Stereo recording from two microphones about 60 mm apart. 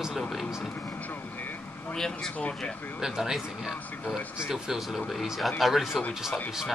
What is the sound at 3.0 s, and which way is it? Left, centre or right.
Speech, centre.